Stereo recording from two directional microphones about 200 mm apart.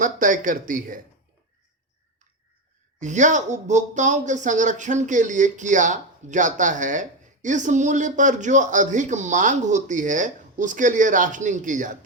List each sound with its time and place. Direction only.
0.0 s speech: 40° right (ahead or behind)
3.0 s speech: 35° right (ahead or behind)